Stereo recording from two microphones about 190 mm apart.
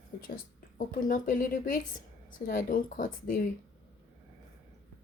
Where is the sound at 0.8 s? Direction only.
45° left (ahead or behind).